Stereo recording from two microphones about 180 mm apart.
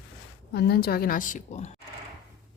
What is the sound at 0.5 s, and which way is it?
A woman's voice, 60° left (ahead or behind).